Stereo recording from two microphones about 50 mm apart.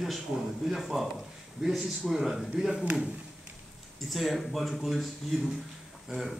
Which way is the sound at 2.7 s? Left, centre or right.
Right.